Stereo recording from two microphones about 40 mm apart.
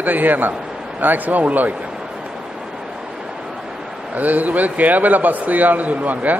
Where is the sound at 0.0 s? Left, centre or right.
Right.